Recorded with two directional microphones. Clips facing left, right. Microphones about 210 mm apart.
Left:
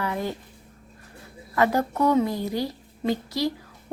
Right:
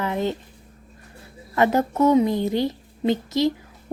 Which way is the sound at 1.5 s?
20° right (ahead or behind).